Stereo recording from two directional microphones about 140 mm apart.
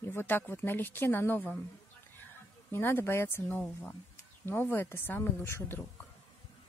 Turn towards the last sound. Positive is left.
turn(degrees=15)  # may be behind; listen again after turning